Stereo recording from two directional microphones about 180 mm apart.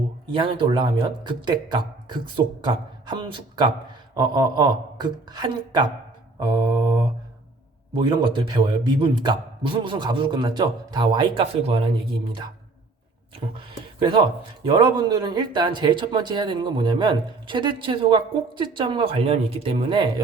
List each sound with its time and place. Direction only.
0.3 s a man's voice: 30° right (ahead or behind)
7.9 s a man's voice: 30° right (ahead or behind)
14.0 s a man's voice: 25° right (ahead or behind)